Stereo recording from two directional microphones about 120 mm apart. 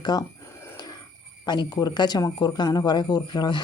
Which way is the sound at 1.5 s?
35° left (ahead or behind).